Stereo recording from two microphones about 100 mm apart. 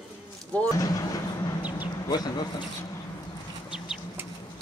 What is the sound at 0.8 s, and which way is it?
Speech, 35° left (ahead or behind).